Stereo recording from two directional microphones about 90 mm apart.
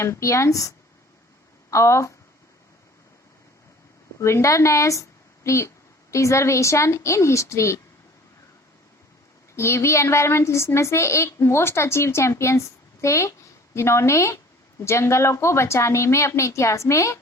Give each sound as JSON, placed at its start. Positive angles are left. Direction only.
{"t": 0.0, "sound": "a woman's voice", "side_deg": 35}
{"t": 1.7, "sound": "a woman's voice", "side_deg": 35}
{"t": 4.2, "sound": "speech", "side_deg": 30}
{"t": 9.6, "sound": "a woman's voice", "side_deg": 30}